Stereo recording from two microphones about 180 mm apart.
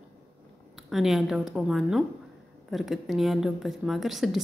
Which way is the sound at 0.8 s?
Centre (ahead or behind).